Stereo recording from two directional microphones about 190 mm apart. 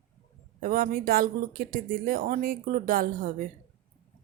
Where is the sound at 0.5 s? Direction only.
45° right (ahead or behind).